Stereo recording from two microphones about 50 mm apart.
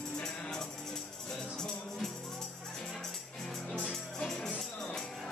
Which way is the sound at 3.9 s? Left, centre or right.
Centre.